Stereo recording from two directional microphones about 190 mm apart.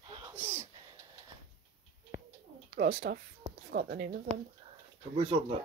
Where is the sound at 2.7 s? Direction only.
60° right (ahead or behind).